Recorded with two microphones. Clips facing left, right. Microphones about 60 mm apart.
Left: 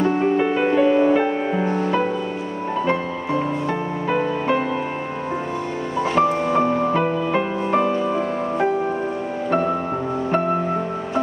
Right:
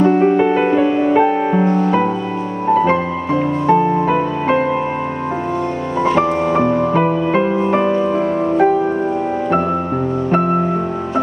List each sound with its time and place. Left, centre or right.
0.0 s music: centre
6.4 s music: right